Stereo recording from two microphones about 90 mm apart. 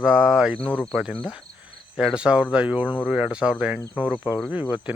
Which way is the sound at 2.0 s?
10° right (ahead or behind).